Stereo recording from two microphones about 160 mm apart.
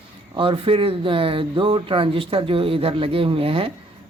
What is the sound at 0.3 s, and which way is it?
Speech, 35° right (ahead or behind).